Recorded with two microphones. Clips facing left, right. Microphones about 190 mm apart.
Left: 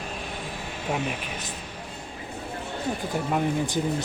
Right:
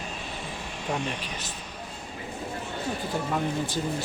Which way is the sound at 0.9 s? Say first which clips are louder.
Left 2 dB; 5° left (ahead or behind).